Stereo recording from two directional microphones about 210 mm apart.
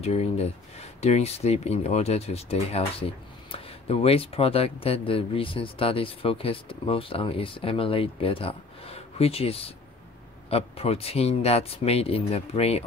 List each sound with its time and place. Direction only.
0.0 s speech: 30° left (ahead or behind)